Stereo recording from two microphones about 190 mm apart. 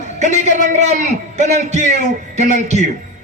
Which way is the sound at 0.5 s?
40° right (ahead or behind).